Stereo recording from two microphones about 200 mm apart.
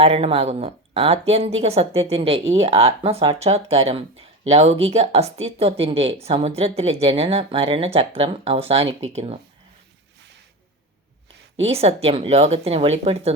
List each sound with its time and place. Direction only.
0.0 s speech: 30° right (ahead or behind)
11.6 s speech: 30° right (ahead or behind)